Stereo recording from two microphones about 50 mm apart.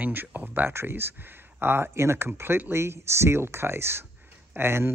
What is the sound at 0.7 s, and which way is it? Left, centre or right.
Speech, right.